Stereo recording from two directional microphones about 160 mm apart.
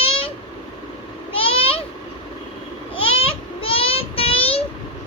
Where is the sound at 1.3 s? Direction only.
35° left (ahead or behind).